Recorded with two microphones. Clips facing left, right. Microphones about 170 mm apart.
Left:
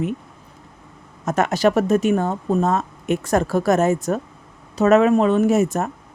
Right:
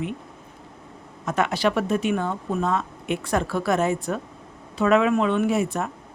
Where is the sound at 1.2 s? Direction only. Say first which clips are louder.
Left 5 dB; 45° left (ahead or behind).